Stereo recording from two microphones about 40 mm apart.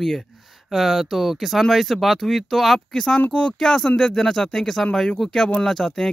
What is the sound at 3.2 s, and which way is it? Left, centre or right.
Speech, left.